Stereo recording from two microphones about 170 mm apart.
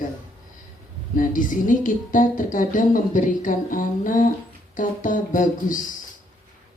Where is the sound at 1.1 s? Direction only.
50° left (ahead or behind).